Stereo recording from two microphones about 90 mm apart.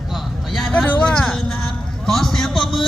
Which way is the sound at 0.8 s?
10° left (ahead or behind).